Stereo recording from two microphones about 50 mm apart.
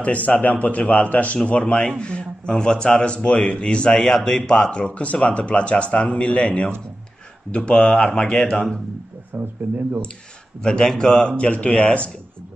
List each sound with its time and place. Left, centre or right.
0.0 s a man's voice: left; by 4.6 s centre
4.6 s a man's voice: left
9.3 s speech: right
10.6 s a man's voice: centre